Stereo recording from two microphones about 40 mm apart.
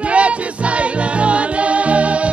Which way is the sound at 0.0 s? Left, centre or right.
Right.